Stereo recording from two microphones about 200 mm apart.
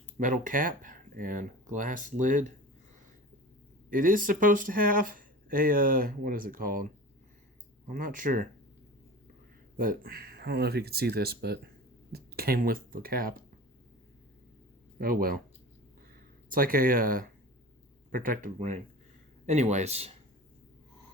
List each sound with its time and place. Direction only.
0.2 s speech: 40° right (ahead or behind)
3.8 s speech: 45° right (ahead or behind)
7.9 s speech: 40° right (ahead or behind)
9.7 s speech: 45° right (ahead or behind)
14.9 s speech: 45° right (ahead or behind)
16.5 s speech: 45° right (ahead or behind)